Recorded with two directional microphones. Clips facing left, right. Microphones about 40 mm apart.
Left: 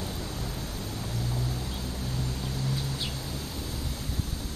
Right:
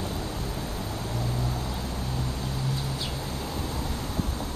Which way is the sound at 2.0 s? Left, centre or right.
Centre.